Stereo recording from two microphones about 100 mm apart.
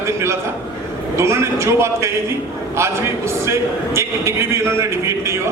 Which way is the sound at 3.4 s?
30° right (ahead or behind).